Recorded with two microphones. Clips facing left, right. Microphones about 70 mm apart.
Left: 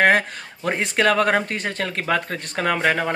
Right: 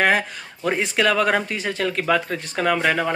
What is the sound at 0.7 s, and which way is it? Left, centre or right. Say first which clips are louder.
Speech: even; left.